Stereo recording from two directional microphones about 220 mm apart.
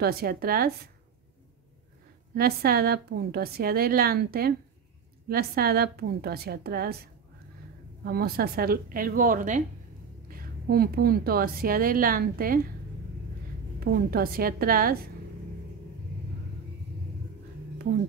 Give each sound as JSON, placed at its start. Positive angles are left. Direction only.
{"t": 0.0, "sound": "a woman's voice", "side_deg": -45}
{"t": 2.3, "sound": "a woman's voice", "side_deg": -45}
{"t": 8.0, "sound": "a woman's voice", "side_deg": -45}
{"t": 13.7, "sound": "a woman's voice", "side_deg": -45}